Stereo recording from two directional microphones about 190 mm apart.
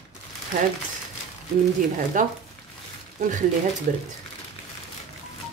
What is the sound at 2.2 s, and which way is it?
A woman's voice, 45° right (ahead or behind).